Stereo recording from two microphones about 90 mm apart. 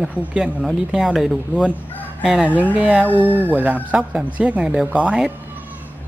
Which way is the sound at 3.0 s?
20° left (ahead or behind).